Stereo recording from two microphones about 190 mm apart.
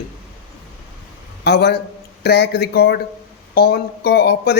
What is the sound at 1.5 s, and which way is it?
Speech, 60° left (ahead or behind).